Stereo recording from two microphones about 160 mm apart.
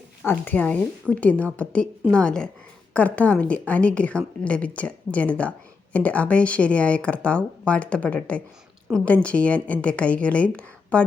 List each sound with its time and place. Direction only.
0.3 s a woman's voice: 10° left (ahead or behind)